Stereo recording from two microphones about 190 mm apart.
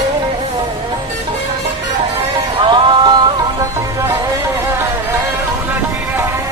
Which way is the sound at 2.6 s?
25° right (ahead or behind).